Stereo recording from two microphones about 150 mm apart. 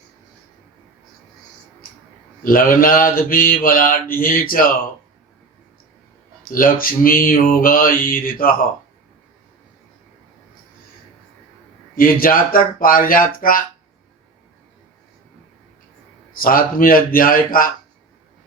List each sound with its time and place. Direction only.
2.4 s mantra: 70° left (ahead or behind)
6.5 s mantra: 70° left (ahead or behind)
11.9 s mantra: 70° left (ahead or behind)
16.4 s mantra: 70° left (ahead or behind)